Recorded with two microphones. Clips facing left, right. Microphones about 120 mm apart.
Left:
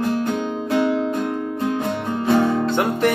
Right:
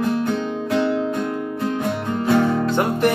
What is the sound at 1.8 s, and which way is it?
Music, 20° left (ahead or behind).